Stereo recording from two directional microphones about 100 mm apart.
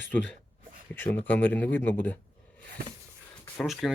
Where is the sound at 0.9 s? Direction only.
20° left (ahead or behind).